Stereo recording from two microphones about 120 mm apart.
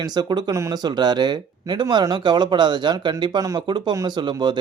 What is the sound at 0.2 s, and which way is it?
Speech, 35° right (ahead or behind).